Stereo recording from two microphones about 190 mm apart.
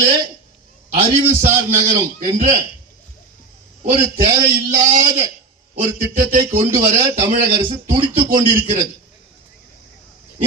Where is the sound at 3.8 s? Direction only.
40° right (ahead or behind).